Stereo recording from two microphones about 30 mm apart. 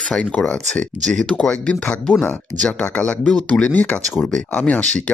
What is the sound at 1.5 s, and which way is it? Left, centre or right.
Speech, left.